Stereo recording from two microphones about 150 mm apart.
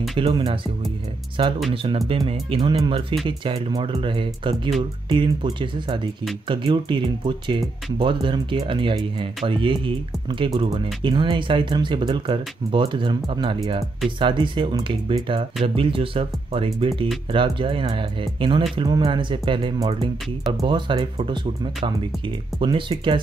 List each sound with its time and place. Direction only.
0.1 s speech: 35° right (ahead or behind)
1.7 s speech: 35° right (ahead or behind)
22.6 s speech: 35° right (ahead or behind)